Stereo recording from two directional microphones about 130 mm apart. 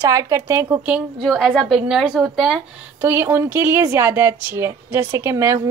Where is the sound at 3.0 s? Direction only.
20° right (ahead or behind).